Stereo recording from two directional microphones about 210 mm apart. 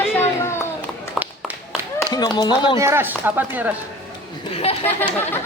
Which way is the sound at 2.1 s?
20° left (ahead or behind).